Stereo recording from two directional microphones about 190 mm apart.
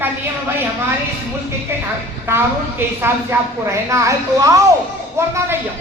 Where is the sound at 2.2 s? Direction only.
10° right (ahead or behind).